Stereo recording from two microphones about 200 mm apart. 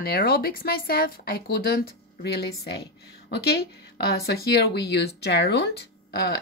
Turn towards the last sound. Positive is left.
turn(degrees=55)  # may be behind; listen again after turning